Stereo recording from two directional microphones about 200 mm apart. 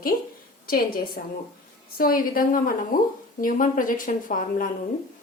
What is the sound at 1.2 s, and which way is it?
A woman's voice, 50° left (ahead or behind).